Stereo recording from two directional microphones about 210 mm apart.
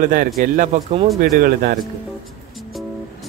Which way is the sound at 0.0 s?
45° right (ahead or behind).